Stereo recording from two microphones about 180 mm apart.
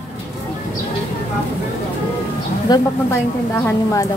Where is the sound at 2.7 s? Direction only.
15° left (ahead or behind).